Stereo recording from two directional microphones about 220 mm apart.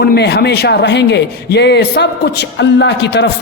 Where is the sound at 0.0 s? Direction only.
45° left (ahead or behind).